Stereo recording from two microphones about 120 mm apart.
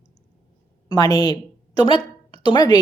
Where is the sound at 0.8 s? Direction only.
35° left (ahead or behind).